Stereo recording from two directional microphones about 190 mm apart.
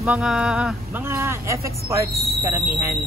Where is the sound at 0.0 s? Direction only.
5° right (ahead or behind).